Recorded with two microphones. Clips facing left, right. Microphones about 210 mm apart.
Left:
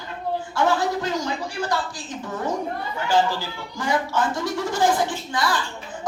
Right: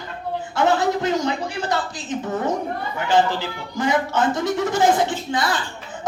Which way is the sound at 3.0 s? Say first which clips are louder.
Right 2 dB; 20° right (ahead or behind).